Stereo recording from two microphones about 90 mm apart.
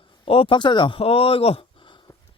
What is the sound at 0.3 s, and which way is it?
Speech, 85° left.